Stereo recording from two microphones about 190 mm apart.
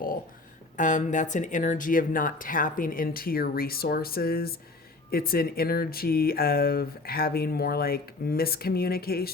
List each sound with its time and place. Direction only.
0.8 s speech: 40° left (ahead or behind)